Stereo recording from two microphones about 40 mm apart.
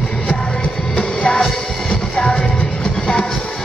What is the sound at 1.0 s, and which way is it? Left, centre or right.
Music, centre.